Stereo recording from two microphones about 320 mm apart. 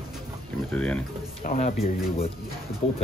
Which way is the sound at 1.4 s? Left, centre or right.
Left.